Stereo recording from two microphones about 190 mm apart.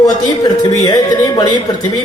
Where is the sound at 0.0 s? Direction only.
25° left (ahead or behind).